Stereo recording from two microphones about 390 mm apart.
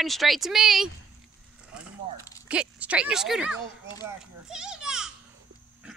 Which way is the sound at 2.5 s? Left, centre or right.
Centre.